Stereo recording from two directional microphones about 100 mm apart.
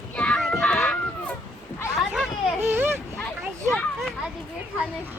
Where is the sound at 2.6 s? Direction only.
20° right (ahead or behind).